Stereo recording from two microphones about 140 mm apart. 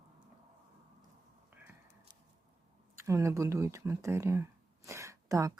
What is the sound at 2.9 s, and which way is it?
Speech, 20° right (ahead or behind).